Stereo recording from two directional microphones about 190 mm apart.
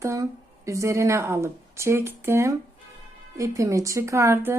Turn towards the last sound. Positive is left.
turn(degrees=-15)  # may be behind; listen again after turning